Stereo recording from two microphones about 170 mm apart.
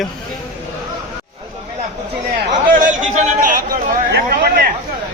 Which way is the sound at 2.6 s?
50° right (ahead or behind).